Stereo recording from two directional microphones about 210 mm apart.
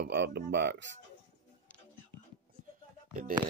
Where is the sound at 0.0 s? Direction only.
50° right (ahead or behind).